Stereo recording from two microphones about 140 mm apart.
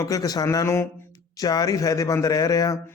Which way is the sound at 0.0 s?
25° left (ahead or behind).